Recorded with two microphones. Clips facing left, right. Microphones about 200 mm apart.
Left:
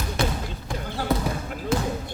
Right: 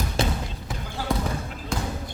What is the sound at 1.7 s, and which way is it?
Basketball bounce, 5° left (ahead or behind).